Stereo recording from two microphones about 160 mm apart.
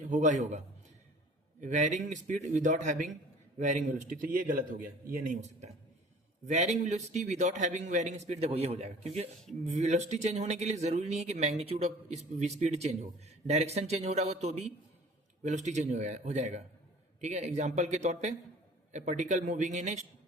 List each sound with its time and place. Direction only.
0.1 s speech: 50° right (ahead or behind)
1.6 s speech: 50° right (ahead or behind)